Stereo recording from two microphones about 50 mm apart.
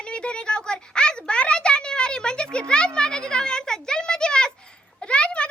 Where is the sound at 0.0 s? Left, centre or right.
Centre.